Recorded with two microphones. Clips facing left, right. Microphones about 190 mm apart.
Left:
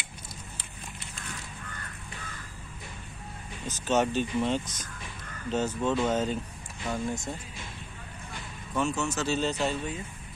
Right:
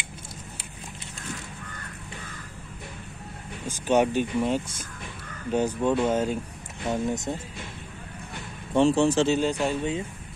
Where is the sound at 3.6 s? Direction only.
10° right (ahead or behind).